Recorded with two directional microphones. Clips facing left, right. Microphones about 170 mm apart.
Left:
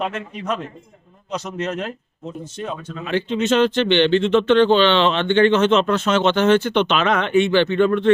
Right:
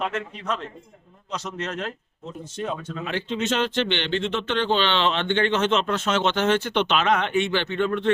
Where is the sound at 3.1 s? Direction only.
65° left (ahead or behind).